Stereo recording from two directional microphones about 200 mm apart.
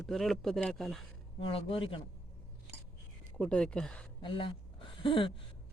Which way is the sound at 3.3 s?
5° left (ahead or behind).